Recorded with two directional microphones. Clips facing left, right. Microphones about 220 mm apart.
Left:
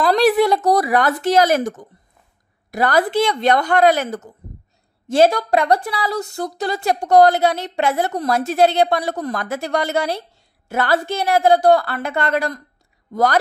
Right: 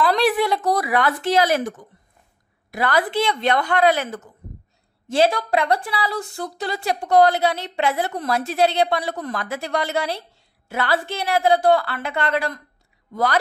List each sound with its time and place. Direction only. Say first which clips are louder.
0.0 s a woman's voice: left 4 dB; 40° left (ahead or behind)